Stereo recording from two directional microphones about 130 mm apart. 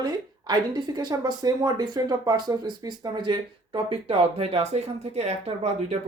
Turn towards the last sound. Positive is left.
turn(degrees=-55)  # may be behind; listen again after turning